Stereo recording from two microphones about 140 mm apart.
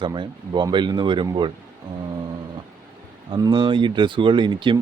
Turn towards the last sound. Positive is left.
turn(degrees=-35)  # may be behind; listen again after turning